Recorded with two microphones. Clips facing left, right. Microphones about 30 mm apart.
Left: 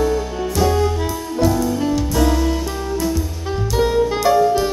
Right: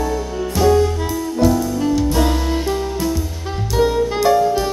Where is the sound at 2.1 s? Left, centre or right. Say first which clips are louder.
Left 1 dB; centre.